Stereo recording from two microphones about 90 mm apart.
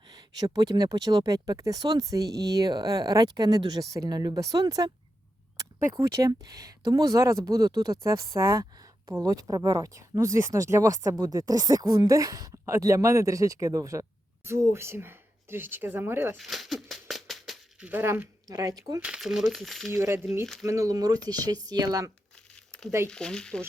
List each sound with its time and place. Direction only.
0.1 s a woman's voice: 45° right (ahead or behind); by 16.4 s 25° right (ahead or behind)
16.4 s a sound: centre (ahead or behind)
17.7 s speech: 15° right (ahead or behind)
18.4 s speech: 40° right (ahead or behind)
18.9 s speech: 10° right (ahead or behind)
19.9 s speech: 35° right (ahead or behind)
22.5 s crumpling: 10° left (ahead or behind)
23.0 s speech: 10° left (ahead or behind)